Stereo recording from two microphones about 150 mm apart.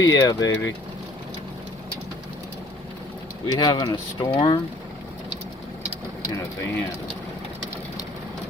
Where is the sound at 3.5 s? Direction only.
25° left (ahead or behind).